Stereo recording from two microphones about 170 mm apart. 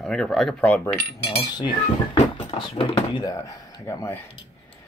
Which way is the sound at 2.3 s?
30° left (ahead or behind).